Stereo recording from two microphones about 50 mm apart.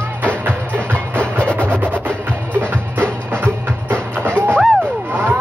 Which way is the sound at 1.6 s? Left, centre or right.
Right.